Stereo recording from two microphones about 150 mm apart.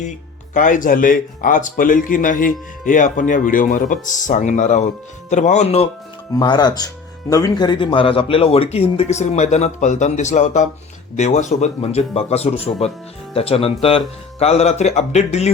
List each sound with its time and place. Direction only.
0.5 s speech: 60° left (ahead or behind)
6.3 s speech: 30° left (ahead or behind); by 15.4 s 45° left (ahead or behind)